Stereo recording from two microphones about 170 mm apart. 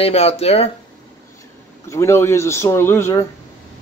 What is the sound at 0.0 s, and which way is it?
Speech, 40° left (ahead or behind).